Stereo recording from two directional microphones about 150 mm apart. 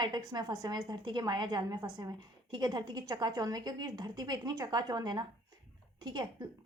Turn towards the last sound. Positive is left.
turn(degrees=-30)  # may be behind; listen again after turning